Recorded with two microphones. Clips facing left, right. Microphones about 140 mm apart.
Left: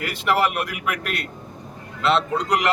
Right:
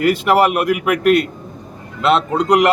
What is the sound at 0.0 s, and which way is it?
A man's voice, 50° right (ahead or behind).